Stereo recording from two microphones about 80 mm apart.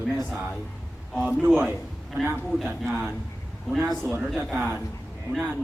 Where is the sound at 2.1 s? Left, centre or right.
Right.